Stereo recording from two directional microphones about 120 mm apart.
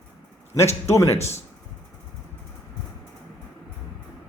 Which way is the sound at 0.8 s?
25° left (ahead or behind).